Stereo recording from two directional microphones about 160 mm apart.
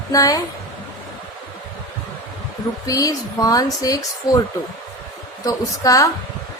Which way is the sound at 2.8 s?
20° left (ahead or behind).